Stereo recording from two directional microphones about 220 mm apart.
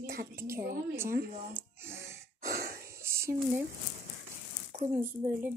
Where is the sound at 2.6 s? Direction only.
45° right (ahead or behind).